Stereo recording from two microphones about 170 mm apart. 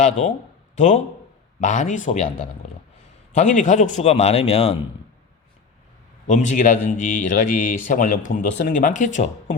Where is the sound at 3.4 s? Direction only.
45° left (ahead or behind).